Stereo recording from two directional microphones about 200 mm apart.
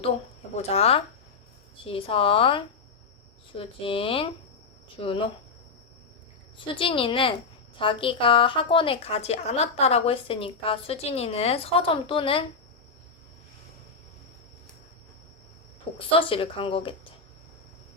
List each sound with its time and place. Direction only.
0.5 s a woman's voice: 30° left (ahead or behind)
6.6 s a woman's voice: 25° left (ahead or behind)
15.8 s a woman's voice: 25° left (ahead or behind)